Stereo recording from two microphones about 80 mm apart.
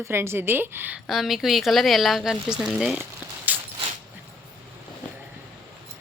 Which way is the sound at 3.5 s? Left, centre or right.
Right.